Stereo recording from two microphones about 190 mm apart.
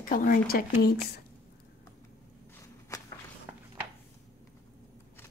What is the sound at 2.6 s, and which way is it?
Walk, 20° left (ahead or behind).